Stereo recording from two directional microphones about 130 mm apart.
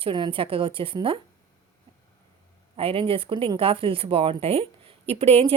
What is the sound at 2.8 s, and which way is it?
Speech, 45° right (ahead or behind).